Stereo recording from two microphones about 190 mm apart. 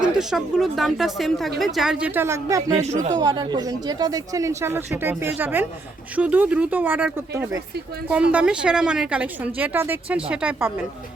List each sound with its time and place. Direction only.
0.0 s speech: centre (ahead or behind)
2.7 s speech: 35° right (ahead or behind)
3.2 s speech: 20° right (ahead or behind); by 10.7 s 5° right (ahead or behind)